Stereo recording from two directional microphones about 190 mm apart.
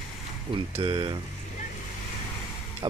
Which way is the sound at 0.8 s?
25° right (ahead or behind).